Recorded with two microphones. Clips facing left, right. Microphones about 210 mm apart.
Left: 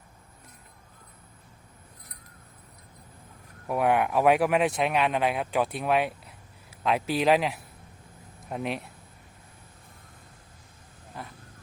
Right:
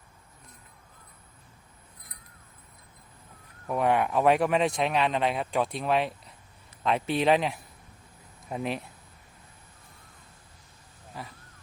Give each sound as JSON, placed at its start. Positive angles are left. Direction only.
{"t": 3.7, "sound": "speech", "side_deg": 5}